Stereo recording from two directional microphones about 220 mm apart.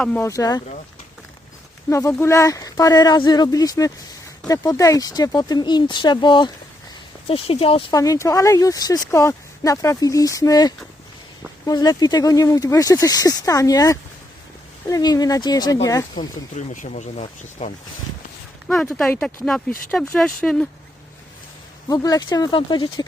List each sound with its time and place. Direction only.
0.0 s speech: 10° left (ahead or behind)
1.9 s speech: 15° left (ahead or behind)
16.6 s speech: 35° left (ahead or behind)
18.7 s speech: 5° left (ahead or behind)
21.8 s speech: 15° left (ahead or behind)